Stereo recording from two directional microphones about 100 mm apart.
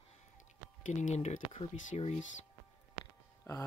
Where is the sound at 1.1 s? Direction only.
85° left.